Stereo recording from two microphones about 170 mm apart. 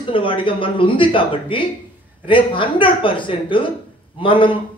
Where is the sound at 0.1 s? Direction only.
30° left (ahead or behind).